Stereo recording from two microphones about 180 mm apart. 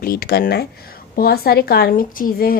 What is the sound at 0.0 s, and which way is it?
A woman's voice, 55° left (ahead or behind).